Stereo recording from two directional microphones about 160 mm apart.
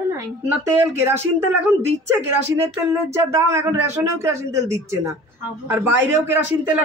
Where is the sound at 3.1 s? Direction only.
20° right (ahead or behind).